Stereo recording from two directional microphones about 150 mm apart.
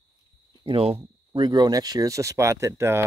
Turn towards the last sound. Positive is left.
turn(degrees=-15)  # may be behind; listen again after turning